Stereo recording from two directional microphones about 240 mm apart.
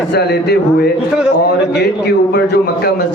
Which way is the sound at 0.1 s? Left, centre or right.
Left.